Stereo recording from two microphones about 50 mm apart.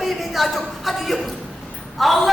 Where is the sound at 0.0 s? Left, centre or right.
Centre.